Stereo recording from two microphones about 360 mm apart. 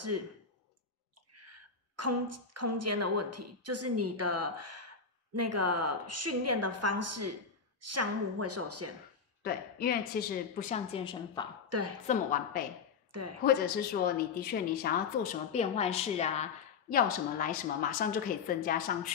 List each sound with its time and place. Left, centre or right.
0.1 s a woman's voice: right
1.3 s a woman's voice: right
9.4 s a woman's voice: left
11.7 s a woman's voice: right
12.1 s a woman's voice: left
13.1 s a woman's voice: right
13.4 s a woman's voice: left